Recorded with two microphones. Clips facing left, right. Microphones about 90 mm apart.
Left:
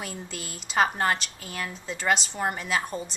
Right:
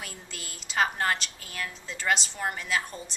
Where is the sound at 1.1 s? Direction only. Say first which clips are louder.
Left 2 dB; 5° left (ahead or behind).